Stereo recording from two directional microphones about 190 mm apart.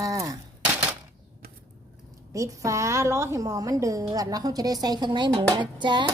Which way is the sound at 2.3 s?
15° right (ahead or behind).